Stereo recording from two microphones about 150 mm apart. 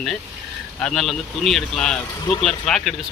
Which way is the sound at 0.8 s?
5° left (ahead or behind).